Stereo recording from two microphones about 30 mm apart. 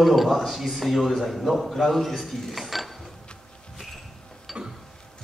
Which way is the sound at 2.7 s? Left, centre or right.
Centre.